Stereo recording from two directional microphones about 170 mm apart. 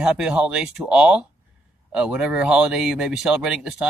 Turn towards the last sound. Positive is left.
turn(degrees=-5)  # may be behind; listen again after turning